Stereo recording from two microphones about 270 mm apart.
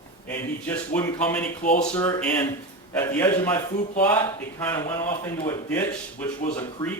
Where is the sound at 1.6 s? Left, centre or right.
Left.